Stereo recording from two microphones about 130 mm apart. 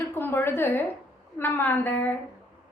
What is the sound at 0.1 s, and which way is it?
A woman's voice, 15° left (ahead or behind).